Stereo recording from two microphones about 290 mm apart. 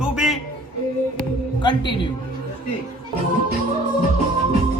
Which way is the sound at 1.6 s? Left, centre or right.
Centre.